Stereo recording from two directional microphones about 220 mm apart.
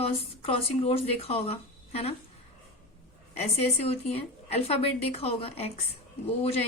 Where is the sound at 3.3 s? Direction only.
30° left (ahead or behind).